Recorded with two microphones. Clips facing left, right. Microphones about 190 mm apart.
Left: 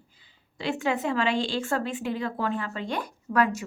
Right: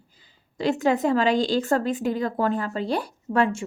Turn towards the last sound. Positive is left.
turn(degrees=-25)  # may be behind; listen again after turning